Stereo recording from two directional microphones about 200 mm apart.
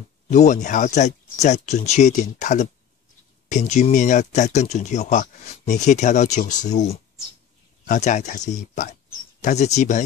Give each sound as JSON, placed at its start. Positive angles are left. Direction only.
{"t": 0.3, "sound": "speech", "side_deg": 35}